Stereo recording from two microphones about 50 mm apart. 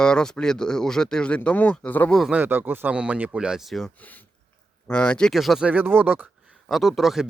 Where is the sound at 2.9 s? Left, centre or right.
Right.